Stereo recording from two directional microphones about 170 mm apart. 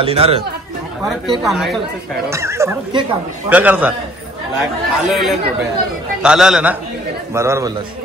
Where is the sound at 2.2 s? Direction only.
15° right (ahead or behind).